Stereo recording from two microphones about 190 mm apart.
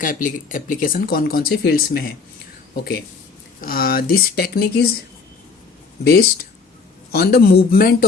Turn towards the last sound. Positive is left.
turn(degrees=50)  # may be behind; listen again after turning